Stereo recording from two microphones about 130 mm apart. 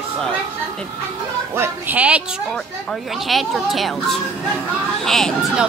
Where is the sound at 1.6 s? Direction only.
15° right (ahead or behind).